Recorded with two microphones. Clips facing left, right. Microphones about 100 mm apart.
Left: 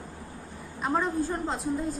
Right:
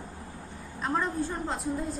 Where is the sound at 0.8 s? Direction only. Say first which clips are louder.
Left 2 dB; 5° left (ahead or behind).